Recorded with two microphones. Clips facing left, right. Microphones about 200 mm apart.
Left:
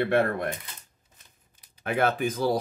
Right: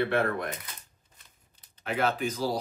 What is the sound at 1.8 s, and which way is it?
Speech, 55° left (ahead or behind).